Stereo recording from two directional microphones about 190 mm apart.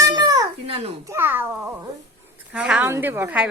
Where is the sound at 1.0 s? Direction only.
10° right (ahead or behind).